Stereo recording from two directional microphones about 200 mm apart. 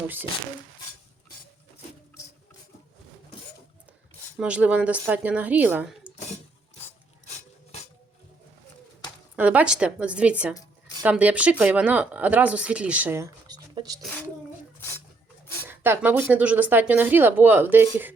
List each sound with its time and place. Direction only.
4.4 s speech: 5° right (ahead or behind)
7.3 s filing: 35° left (ahead or behind)
9.3 s a woman's voice: 5° right (ahead or behind)
14.0 s a child's voice: 10° left (ahead or behind)
15.6 s speech: 10° right (ahead or behind)